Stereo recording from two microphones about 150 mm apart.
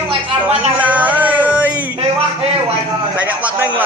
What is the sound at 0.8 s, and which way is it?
Music, 10° right (ahead or behind).